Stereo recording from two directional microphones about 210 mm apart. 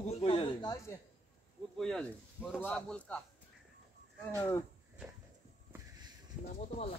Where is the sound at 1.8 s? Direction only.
Centre (ahead or behind).